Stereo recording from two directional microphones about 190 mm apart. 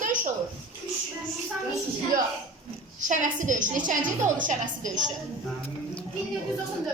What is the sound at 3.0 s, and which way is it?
A woman's voice, 40° right (ahead or behind).